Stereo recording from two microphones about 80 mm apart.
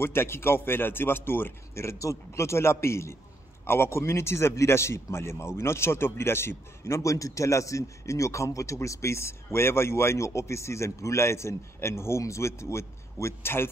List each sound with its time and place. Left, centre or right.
0.0 s a man's voice: left